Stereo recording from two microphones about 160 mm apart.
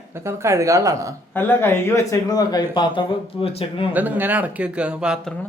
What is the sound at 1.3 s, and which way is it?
Speech, 15° left (ahead or behind).